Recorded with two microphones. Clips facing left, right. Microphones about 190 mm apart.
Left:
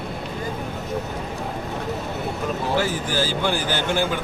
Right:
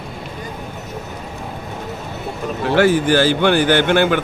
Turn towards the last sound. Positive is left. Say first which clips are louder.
# right 8 dB
turn(degrees=-70)  # may be behind; listen again after turning